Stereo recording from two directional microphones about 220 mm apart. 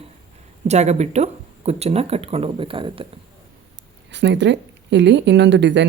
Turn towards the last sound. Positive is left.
turn(degrees=-55)  # may be behind; listen again after turning